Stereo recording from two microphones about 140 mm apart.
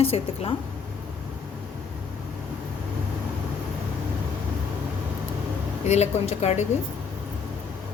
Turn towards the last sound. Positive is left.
turn(degrees=55)  # may be behind; listen again after turning